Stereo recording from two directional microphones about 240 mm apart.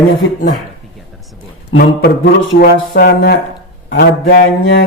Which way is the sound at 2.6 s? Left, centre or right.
Left.